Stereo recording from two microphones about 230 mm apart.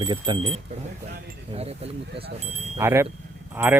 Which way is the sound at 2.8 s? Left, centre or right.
Centre.